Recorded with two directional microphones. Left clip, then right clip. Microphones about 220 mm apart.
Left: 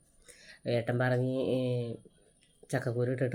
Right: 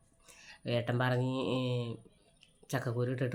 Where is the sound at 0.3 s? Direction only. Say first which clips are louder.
Even; 65° right (ahead or behind).